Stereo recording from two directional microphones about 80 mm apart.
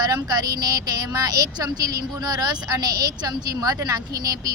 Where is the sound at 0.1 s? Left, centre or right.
Right.